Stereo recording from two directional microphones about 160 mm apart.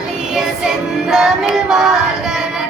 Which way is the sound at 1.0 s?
Centre (ahead or behind).